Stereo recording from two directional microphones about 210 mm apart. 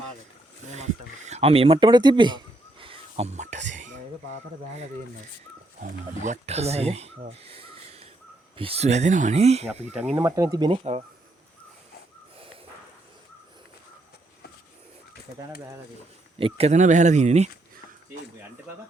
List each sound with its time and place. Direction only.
0.7 s a sound: 35° right (ahead or behind)
5.8 s speech: 35° right (ahead or behind)
10.2 s speech: 15° right (ahead or behind)
16.4 s speech: 30° right (ahead or behind)